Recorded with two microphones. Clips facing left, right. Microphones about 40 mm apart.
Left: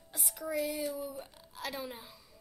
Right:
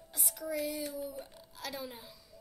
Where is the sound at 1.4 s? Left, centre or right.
Centre.